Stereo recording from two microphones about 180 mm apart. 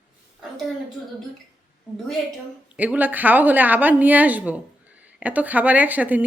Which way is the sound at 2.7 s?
10° right (ahead or behind).